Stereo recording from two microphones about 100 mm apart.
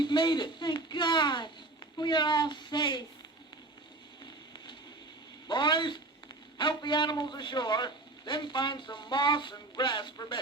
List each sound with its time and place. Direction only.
0.0 s speech: 50° left (ahead or behind)
5.5 s a man's voice: 50° left (ahead or behind)